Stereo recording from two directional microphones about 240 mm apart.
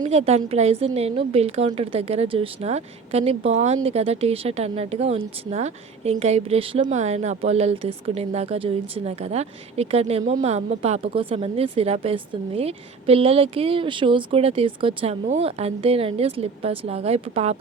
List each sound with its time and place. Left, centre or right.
0.0 s a woman's voice: right